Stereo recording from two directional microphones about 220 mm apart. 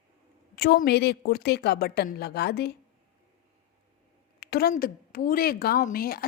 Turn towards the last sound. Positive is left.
turn(degrees=40)  # may be behind; listen again after turning